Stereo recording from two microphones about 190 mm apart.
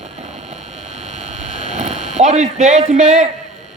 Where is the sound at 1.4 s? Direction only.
40° right (ahead or behind).